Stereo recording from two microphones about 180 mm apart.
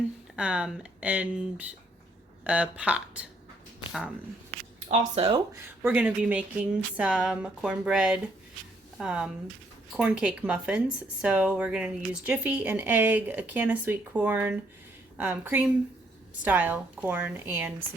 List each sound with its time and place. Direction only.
0.3 s speech: 5° right (ahead or behind)
4.9 s speech: 35° right (ahead or behind)
5.8 s speech: 10° right (ahead or behind)